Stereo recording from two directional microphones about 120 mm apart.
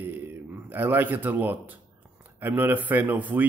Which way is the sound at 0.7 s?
15° right (ahead or behind).